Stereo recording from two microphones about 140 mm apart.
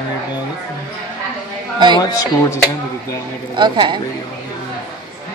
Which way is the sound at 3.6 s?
30° right (ahead or behind).